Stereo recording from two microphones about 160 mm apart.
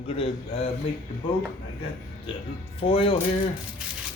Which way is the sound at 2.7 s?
35° left (ahead or behind).